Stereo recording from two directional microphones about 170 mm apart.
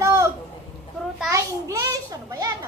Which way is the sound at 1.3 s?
20° right (ahead or behind).